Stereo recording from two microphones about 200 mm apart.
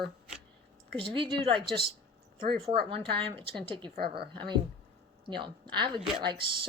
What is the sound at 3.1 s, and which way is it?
Speech, 25° right (ahead or behind).